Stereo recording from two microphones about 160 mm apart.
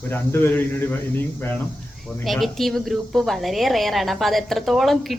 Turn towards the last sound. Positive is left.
turn(degrees=0)  # may be behind; listen again after turning